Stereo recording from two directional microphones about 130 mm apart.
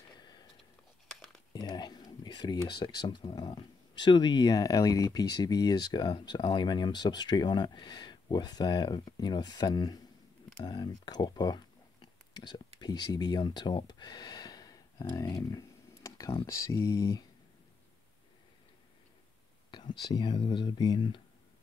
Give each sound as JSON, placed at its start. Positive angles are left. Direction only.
{"t": 1.5, "sound": "speech", "side_deg": 30}
{"t": 10.6, "sound": "a sound", "side_deg": 35}
{"t": 16.4, "sound": "speech", "side_deg": 20}
{"t": 19.7, "sound": "speech", "side_deg": 35}